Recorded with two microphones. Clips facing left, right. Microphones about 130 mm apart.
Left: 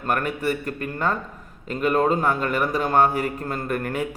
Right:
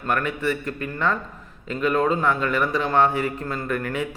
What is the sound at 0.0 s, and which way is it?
A man's voice, 40° left (ahead or behind).